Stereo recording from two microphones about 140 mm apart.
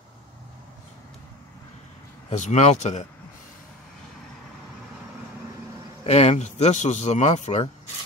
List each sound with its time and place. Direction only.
2.2 s speech: 55° left (ahead or behind)
6.0 s speech: 50° left (ahead or behind)